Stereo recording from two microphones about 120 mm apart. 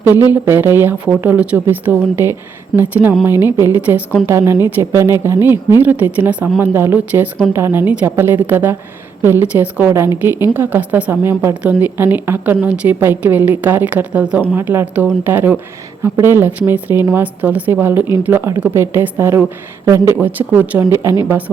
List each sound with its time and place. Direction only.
0.0 s a woman's voice: 15° right (ahead or behind)